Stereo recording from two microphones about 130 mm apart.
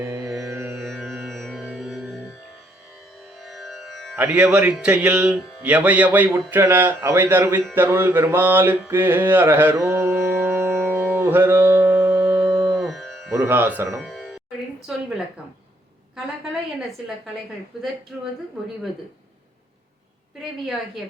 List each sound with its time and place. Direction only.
0.0 s music: 10° right (ahead or behind)
0.5 s music: 20° right (ahead or behind)
0.8 s music: centre (ahead or behind)
3.4 s music: centre (ahead or behind)
4.2 s mantra: 15° right (ahead or behind)
9.7 s carnatic music: 15° right (ahead or behind)
12.8 s music: centre (ahead or behind)
13.4 s mantra: 15° right (ahead or behind)
14.0 s music: centre (ahead or behind)
14.9 s a woman's voice: centre (ahead or behind)
16.1 s a woman's voice: centre (ahead or behind)
17.7 s a woman's voice: centre (ahead or behind)